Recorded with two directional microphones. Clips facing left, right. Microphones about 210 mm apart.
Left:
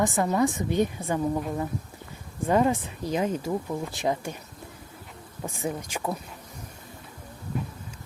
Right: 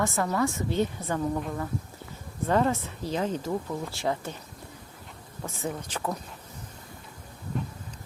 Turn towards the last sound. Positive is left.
turn(degrees=10)  # may be behind; listen again after turning